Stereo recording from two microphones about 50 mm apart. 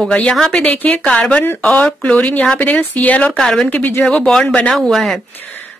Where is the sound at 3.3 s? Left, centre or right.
Centre.